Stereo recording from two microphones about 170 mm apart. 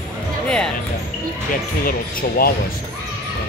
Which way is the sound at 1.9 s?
60° left (ahead or behind).